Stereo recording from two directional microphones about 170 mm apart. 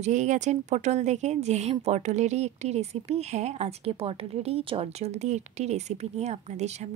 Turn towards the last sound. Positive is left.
turn(degrees=-40)  # may be behind; listen again after turning